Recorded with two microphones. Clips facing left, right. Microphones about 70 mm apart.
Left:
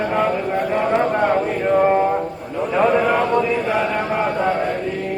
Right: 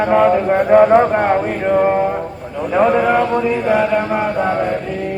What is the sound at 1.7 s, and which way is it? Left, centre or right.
Mantra, centre.